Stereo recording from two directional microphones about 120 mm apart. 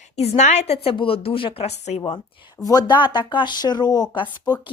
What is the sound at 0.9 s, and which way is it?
Speech, 50° left (ahead or behind).